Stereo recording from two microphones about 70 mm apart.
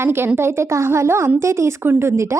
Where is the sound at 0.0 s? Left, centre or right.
Right.